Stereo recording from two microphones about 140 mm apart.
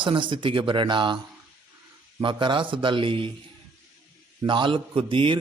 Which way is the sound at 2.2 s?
35° right (ahead or behind).